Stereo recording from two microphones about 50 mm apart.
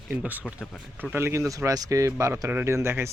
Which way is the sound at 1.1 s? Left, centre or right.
Right.